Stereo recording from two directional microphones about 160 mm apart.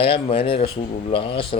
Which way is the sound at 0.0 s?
35° left (ahead or behind).